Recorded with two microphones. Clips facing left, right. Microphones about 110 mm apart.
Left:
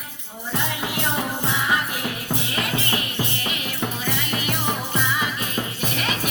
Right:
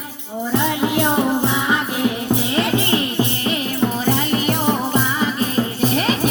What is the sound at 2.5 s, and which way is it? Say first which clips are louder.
Music: right 7 dB; 30° right (ahead or behind).